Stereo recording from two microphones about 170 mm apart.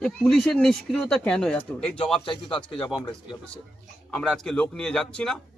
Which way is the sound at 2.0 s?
30° left (ahead or behind).